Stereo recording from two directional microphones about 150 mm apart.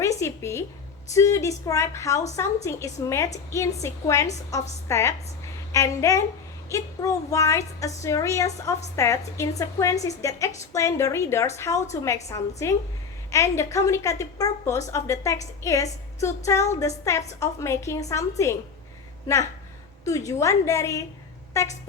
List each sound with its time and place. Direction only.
0.0 s a sound: 20° left (ahead or behind)
1.1 s a woman's voice: 20° left (ahead or behind)
20.1 s a woman's voice: 20° left (ahead or behind)